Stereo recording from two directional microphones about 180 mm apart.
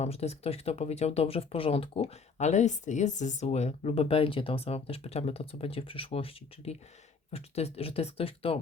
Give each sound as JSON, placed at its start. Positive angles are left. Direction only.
{"t": 0.0, "sound": "speech", "side_deg": 35}